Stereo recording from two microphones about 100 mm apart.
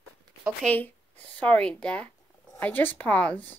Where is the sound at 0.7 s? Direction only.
15° left (ahead or behind).